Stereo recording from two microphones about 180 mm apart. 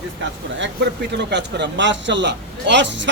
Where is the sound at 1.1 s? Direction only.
70° right (ahead or behind).